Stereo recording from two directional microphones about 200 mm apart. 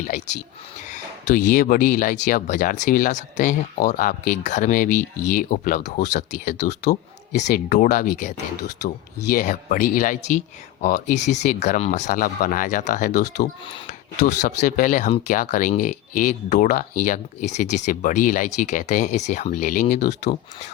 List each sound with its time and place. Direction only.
0.9 s speech: 40° left (ahead or behind)
7.3 s speech: 40° left (ahead or behind)